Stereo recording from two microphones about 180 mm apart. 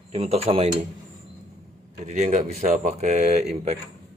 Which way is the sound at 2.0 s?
40° right (ahead or behind).